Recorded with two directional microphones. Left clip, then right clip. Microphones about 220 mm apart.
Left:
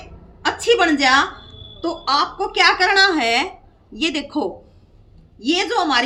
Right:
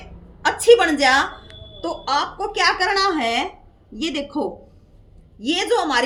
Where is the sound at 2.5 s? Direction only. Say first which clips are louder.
Left 4 dB; centre (ahead or behind).